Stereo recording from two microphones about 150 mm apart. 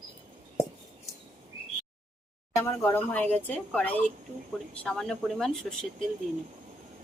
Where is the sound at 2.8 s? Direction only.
10° left (ahead or behind).